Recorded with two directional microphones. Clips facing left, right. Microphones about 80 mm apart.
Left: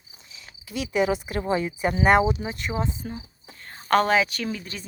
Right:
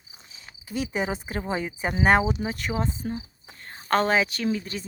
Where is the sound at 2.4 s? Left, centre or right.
Right.